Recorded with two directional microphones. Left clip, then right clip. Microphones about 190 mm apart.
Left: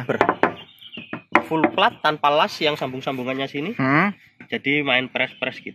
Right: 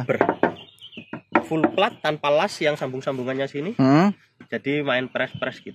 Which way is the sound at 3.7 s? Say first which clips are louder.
Right 1 dB; 65° right (ahead or behind).